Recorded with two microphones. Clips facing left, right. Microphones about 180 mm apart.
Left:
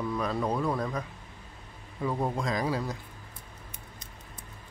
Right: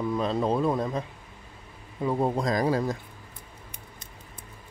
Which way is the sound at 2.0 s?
25° right (ahead or behind).